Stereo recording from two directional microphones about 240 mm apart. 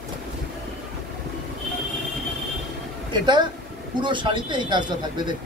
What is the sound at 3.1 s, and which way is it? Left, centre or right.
A man's voice, centre.